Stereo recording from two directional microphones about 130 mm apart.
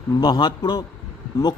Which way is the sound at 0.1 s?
30° left (ahead or behind).